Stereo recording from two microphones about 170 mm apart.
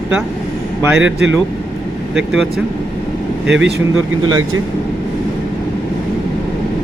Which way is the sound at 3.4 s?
90° right.